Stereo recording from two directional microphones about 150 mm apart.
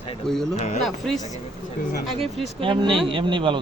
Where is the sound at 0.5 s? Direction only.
50° left (ahead or behind).